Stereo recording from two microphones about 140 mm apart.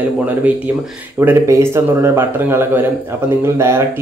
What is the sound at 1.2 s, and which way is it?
Speech, 15° right (ahead or behind).